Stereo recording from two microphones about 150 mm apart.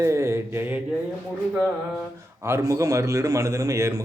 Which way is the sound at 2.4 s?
20° right (ahead or behind).